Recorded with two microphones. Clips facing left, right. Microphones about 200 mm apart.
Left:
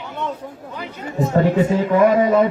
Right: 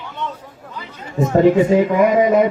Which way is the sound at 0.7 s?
60° left (ahead or behind).